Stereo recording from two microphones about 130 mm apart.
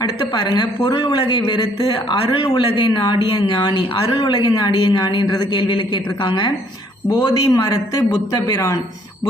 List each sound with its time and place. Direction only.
0.0 s a man's voice: 35° left (ahead or behind)